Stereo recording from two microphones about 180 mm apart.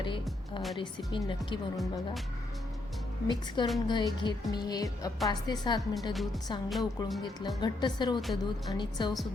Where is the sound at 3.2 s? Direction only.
25° left (ahead or behind).